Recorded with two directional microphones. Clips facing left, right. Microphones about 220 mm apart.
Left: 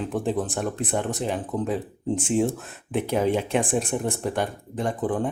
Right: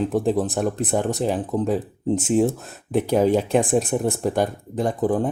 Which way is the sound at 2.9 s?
35° right (ahead or behind).